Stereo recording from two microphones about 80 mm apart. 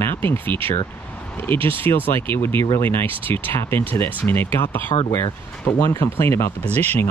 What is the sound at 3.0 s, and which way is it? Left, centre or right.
Speech, right.